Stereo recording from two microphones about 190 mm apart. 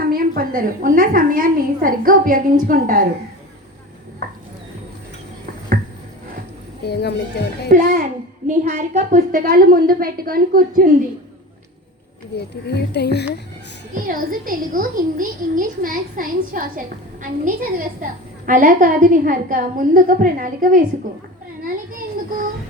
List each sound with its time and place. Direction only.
0.0 s a woman's voice: 50° right (ahead or behind)
6.8 s speech: 60° left (ahead or behind)
7.7 s a child's voice: 40° right (ahead or behind)
12.3 s speech: 65° left (ahead or behind)
13.9 s a woman's voice: 45° right (ahead or behind)